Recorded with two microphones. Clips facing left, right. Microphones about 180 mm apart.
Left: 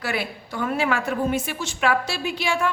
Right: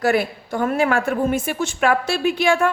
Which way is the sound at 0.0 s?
45° right (ahead or behind).